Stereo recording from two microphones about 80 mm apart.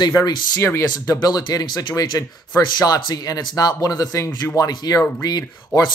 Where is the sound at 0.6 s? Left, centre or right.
Left.